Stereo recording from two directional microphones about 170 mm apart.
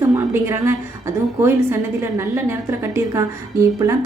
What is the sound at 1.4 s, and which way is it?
A woman's voice, 15° right (ahead or behind).